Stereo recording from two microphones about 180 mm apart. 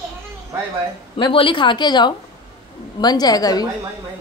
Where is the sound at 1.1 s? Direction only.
30° left (ahead or behind).